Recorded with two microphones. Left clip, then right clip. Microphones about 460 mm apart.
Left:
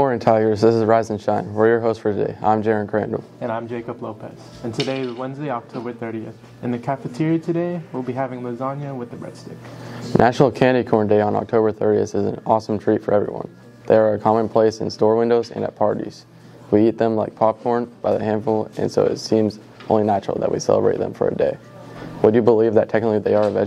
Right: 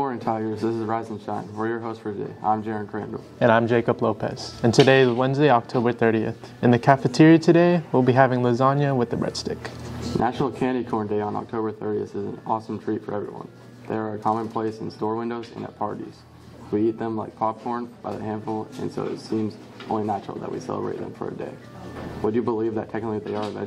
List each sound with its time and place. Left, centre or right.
0.0 s speech: left
3.3 s a man's voice: right
10.2 s speech: left